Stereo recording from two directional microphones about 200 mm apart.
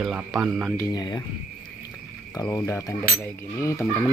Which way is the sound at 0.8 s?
20° left (ahead or behind).